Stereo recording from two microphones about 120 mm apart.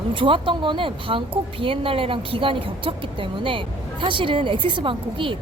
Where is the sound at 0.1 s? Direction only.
45° right (ahead or behind).